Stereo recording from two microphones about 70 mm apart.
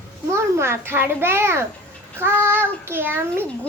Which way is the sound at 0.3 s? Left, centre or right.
Right.